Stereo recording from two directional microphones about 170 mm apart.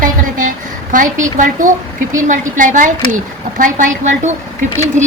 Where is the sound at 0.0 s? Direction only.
50° right (ahead or behind).